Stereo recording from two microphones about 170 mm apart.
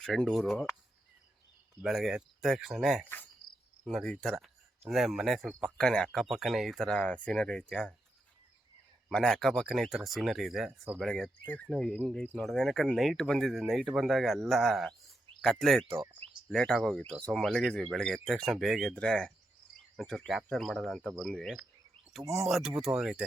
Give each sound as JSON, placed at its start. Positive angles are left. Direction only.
{"t": 0.0, "sound": "speech", "side_deg": 5}
{"t": 1.8, "sound": "speech", "side_deg": 0}
{"t": 9.0, "sound": "speech", "side_deg": 5}
{"t": 22.2, "sound": "speech", "side_deg": -15}
{"t": 22.4, "sound": "speech", "side_deg": 0}